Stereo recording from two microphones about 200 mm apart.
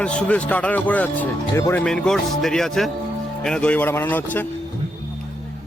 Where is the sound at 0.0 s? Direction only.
5° left (ahead or behind).